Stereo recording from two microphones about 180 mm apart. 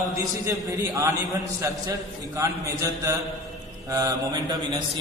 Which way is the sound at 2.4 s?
20° right (ahead or behind).